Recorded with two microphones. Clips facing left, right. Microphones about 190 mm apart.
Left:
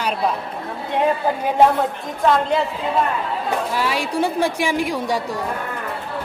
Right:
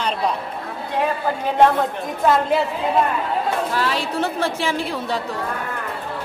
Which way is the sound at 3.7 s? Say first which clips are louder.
Left 1 dB; 10° left (ahead or behind).